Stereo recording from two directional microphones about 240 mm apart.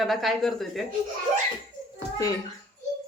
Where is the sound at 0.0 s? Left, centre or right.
Centre.